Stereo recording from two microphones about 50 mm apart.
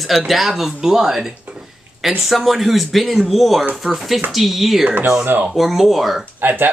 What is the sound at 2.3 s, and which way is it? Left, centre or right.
Speech, centre.